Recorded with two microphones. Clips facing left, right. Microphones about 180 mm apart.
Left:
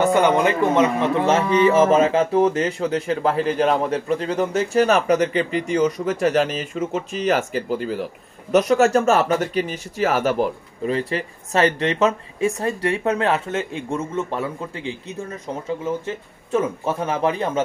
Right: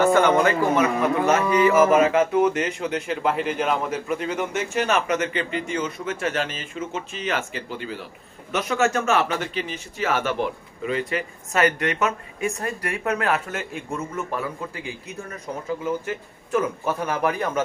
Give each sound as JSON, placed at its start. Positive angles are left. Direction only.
{"t": 0.0, "sound": "a man's voice", "side_deg": 15}